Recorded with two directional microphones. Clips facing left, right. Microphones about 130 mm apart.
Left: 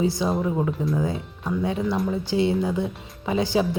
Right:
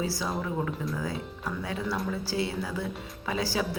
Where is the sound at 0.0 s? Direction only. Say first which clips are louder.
Left 8 dB; 20° left (ahead or behind).